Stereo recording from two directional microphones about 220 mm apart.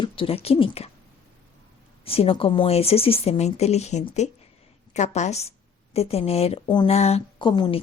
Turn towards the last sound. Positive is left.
turn(degrees=20)  # may be behind; listen again after turning